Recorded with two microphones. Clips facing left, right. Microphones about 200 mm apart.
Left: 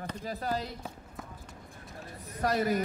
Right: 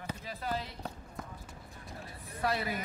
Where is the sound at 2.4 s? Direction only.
45° left (ahead or behind).